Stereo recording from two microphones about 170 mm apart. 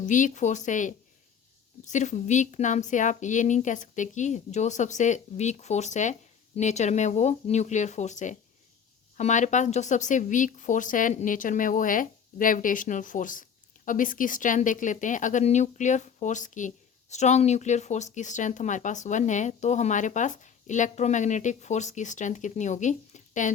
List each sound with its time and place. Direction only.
0.0 s speech: 50° left (ahead or behind)